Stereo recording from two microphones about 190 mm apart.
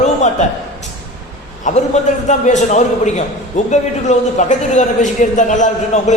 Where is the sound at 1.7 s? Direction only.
40° left (ahead or behind).